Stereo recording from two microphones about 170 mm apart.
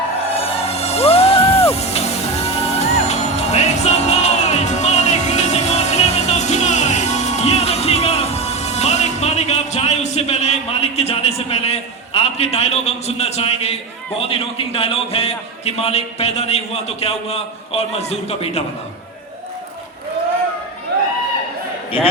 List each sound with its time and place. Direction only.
0.3 s music: 35° left (ahead or behind)
14.2 s a man's voice: 35° left (ahead or behind)